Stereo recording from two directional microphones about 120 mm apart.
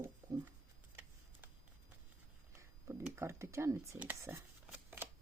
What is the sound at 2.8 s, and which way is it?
Speech, 25° right (ahead or behind).